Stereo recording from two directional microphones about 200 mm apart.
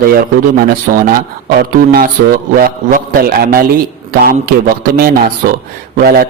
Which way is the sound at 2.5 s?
45° right (ahead or behind).